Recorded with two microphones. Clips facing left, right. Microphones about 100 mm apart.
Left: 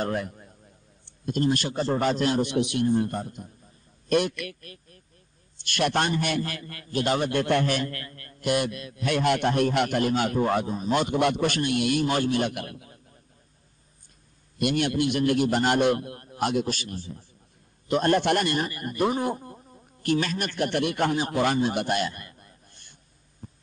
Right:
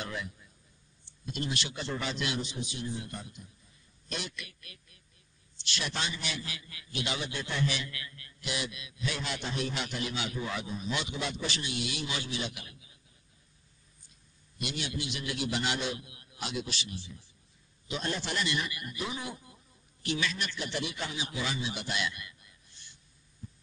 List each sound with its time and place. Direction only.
0.0 s a man's voice: 50° left (ahead or behind)
2.4 s a man's voice: 65° left (ahead or behind)
4.6 s a man's voice: 45° left (ahead or behind)
5.6 s a man's voice: 55° left (ahead or behind)
14.6 s a man's voice: 55° left (ahead or behind)
23.4 s heart sounds: 55° left (ahead or behind)